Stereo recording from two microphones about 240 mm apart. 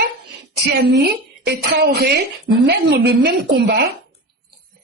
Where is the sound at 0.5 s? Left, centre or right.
Right.